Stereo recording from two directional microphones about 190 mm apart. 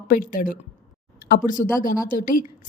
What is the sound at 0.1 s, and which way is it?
A woman's voice, 50° left (ahead or behind).